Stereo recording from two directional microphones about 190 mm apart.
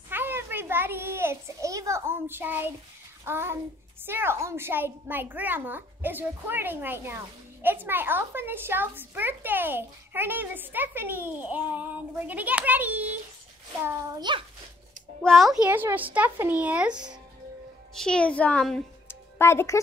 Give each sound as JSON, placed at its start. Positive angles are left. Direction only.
{"t": 0.1, "sound": "a sound", "side_deg": -10}
{"t": 3.3, "sound": "a woman's voice", "side_deg": -10}
{"t": 13.8, "sound": "a child's voice", "side_deg": -20}
{"t": 15.2, "sound": "a woman's voice", "side_deg": 0}